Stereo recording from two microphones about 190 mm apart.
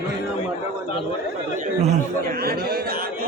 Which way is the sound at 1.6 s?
40° right (ahead or behind).